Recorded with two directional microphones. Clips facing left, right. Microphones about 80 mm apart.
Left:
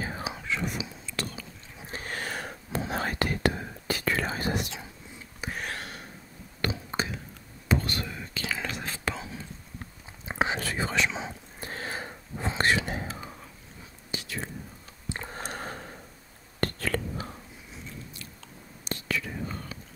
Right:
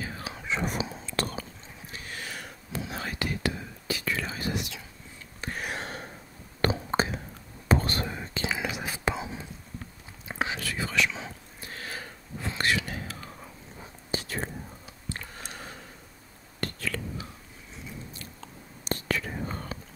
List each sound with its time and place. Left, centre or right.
0.3 s whispering: centre
0.7 s whispering: right
1.9 s whispering: left
5.4 s a sound: centre
6.6 s whispering: right
8.5 s whispering: centre
10.2 s whispering: left
14.1 s whispering: right
15.0 s a sound: left
15.3 s a sound: left
16.5 s whispering: left
18.9 s whispering: right